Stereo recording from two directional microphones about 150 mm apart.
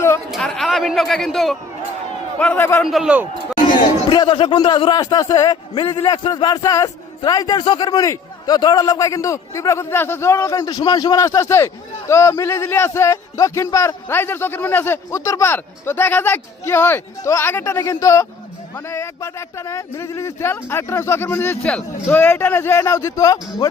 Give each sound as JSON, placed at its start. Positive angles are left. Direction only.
{"t": 0.3, "sound": "speech", "side_deg": 0}
{"t": 2.8, "sound": "a man's voice", "side_deg": -5}
{"t": 4.1, "sound": "a man's voice", "side_deg": 30}